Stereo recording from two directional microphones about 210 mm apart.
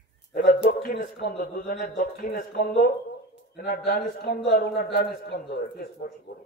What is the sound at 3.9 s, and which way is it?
A man's voice, 45° left (ahead or behind).